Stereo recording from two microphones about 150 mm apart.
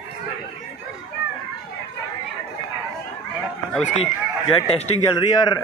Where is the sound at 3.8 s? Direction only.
45° left (ahead or behind).